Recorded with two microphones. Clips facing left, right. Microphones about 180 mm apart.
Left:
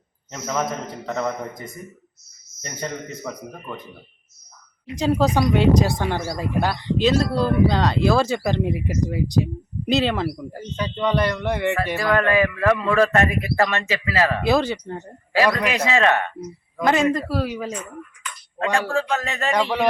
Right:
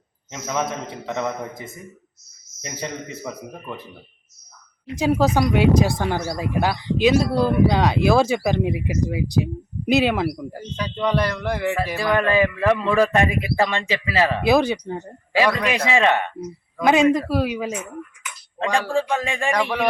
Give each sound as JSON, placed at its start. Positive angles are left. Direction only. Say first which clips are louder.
{"t": 0.3, "sound": "a man's voice", "louder": "even", "side_deg": 0}
{"t": 2.8, "sound": "a man's voice", "louder": "left 1 dB", "side_deg": -5}
{"t": 4.9, "sound": "speech", "louder": "right 1 dB", "side_deg": -5}
{"t": 10.6, "sound": "a man's voice", "louder": "left 1 dB", "side_deg": 5}
{"t": 11.9, "sound": "speech", "louder": "right 1 dB", "side_deg": -15}